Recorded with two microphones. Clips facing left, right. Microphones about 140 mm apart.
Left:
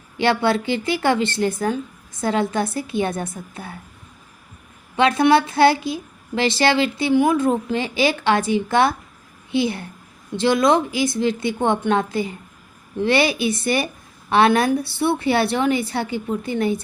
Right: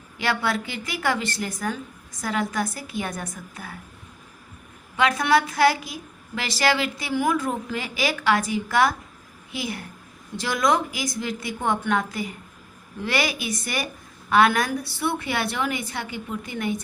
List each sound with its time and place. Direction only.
0.2 s a woman's voice: 25° left (ahead or behind)
4.9 s a woman's voice: 30° left (ahead or behind)